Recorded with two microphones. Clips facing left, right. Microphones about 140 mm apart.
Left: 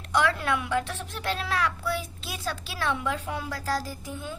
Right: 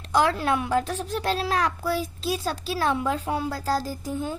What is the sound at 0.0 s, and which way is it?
A woman's voice, 35° right (ahead or behind).